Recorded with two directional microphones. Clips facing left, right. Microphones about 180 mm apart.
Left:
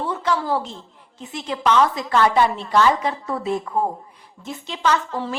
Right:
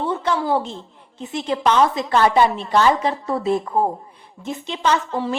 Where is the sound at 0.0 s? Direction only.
25° right (ahead or behind).